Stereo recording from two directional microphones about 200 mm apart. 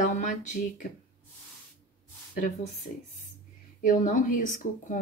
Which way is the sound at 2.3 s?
40° left (ahead or behind).